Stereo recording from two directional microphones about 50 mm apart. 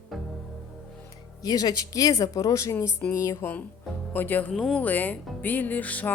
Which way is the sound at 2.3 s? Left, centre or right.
Left.